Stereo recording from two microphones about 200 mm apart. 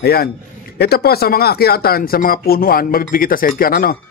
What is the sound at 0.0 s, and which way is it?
Speech, 50° left (ahead or behind).